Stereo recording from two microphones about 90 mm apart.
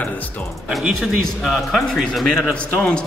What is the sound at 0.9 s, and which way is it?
A man's voice, centre (ahead or behind).